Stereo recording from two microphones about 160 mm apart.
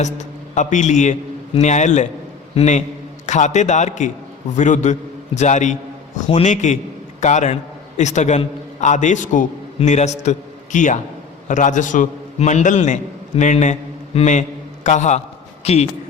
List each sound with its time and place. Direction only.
0.0 s a man's voice: 50° left (ahead or behind)